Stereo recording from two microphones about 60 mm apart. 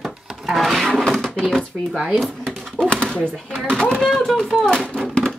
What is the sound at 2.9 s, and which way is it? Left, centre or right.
Speech, centre.